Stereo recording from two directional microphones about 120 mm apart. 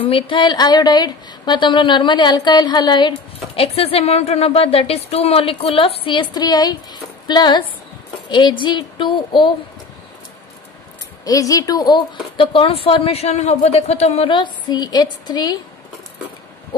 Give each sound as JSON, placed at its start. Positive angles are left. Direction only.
{"t": 0.1, "sound": "a woman's voice", "side_deg": 45}
{"t": 3.5, "sound": "speech", "side_deg": 55}
{"t": 6.3, "sound": "a woman's voice", "side_deg": 35}
{"t": 11.2, "sound": "a woman's voice", "side_deg": 30}
{"t": 14.3, "sound": "a woman's voice", "side_deg": 40}